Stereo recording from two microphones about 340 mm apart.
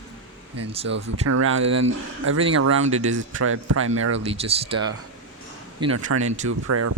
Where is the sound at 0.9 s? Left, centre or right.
Right.